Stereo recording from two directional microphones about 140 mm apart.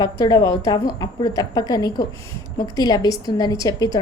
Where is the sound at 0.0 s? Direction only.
30° left (ahead or behind).